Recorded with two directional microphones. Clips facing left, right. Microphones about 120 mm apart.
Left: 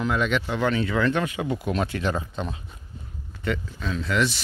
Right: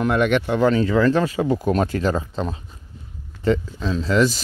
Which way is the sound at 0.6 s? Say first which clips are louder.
Right 6 dB; 35° right (ahead or behind).